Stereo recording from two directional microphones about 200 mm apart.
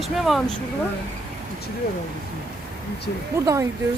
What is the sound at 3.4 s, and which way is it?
Speech, 15° right (ahead or behind).